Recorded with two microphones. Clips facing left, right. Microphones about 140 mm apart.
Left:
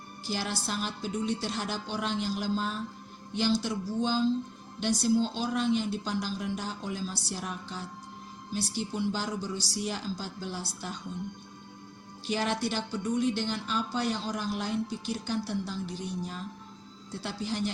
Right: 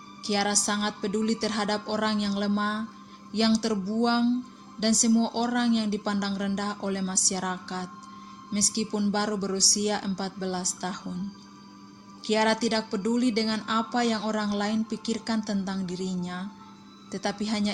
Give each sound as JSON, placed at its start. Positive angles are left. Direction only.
{"t": 0.2, "sound": "speech", "side_deg": -75}
{"t": 12.2, "sound": "speech", "side_deg": -80}